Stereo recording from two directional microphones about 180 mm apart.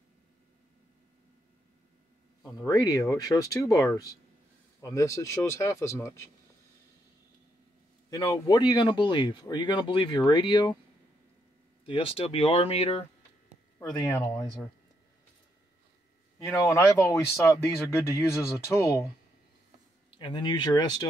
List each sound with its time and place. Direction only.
2.5 s speech: 20° left (ahead or behind)
8.1 s speech: 20° left (ahead or behind)
11.8 s speech: 30° left (ahead or behind)
13.9 s speech: 20° left (ahead or behind)
16.3 s speech: 15° left (ahead or behind)
20.1 s speech: 25° left (ahead or behind)